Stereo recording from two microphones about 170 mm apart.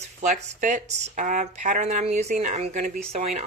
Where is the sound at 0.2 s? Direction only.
45° right (ahead or behind).